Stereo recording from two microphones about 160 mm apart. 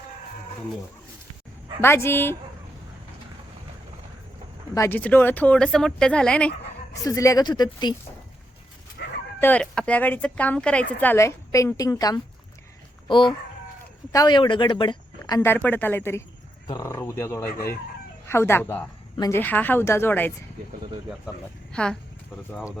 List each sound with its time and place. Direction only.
1.8 s speech: 15° left (ahead or behind)
4.7 s speech: 15° left (ahead or behind)
6.9 s a woman's voice: 20° left (ahead or behind)
9.0 s bow-wow: 90° left
9.4 s a woman's voice: 10° left (ahead or behind)
15.5 s speech: 10° left (ahead or behind)
21.7 s speech: 5° left (ahead or behind)